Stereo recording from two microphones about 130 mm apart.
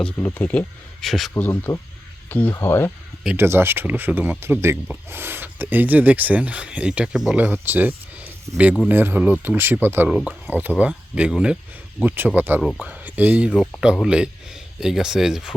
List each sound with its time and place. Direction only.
0.0 s speech: 15° left (ahead or behind)
1.0 s speech: centre (ahead or behind)
1.3 s speech: 15° left (ahead or behind)
3.3 s speech: 20° right (ahead or behind); by 7.3 s 5° right (ahead or behind)
7.3 s speech: 15° right (ahead or behind)
10.1 s speech: centre (ahead or behind)
10.5 s speech: 15° right (ahead or behind)